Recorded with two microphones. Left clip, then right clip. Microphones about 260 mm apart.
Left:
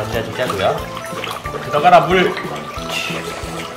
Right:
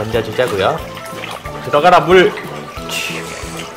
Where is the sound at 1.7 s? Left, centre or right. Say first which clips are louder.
Right 2 dB; right.